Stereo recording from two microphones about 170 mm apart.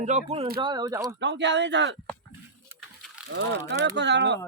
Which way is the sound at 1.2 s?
90° right.